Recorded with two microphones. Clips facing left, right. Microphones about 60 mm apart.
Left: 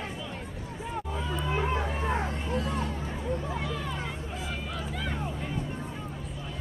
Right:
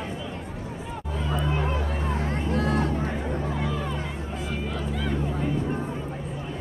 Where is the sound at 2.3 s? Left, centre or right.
Right.